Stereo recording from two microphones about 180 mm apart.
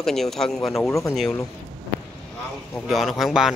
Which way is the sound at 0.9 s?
15° left (ahead or behind).